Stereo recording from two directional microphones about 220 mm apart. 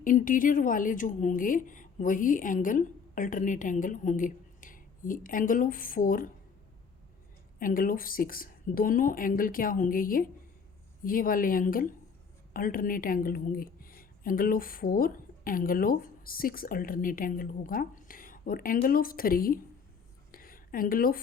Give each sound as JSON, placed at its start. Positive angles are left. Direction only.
{"t": 0.0, "sound": "a woman's voice", "side_deg": 35}
{"t": 7.6, "sound": "a woman's voice", "side_deg": 40}
{"t": 20.3, "sound": "a sound", "side_deg": 40}